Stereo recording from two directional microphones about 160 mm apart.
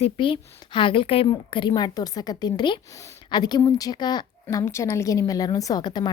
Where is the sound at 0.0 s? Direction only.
30° left (ahead or behind).